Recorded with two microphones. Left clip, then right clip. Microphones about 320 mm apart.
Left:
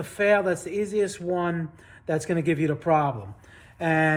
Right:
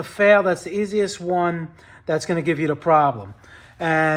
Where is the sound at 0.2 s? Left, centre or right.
Right.